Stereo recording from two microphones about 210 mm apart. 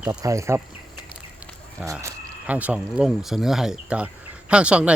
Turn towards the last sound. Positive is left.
turn(degrees=-5)  # may be behind; listen again after turning